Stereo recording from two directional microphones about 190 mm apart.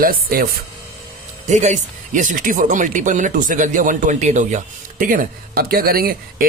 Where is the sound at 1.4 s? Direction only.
40° right (ahead or behind).